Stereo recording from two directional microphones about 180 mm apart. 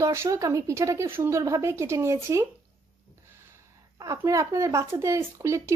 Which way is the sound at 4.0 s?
20° right (ahead or behind).